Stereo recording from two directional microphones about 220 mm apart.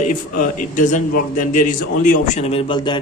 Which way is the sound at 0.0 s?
35° left (ahead or behind).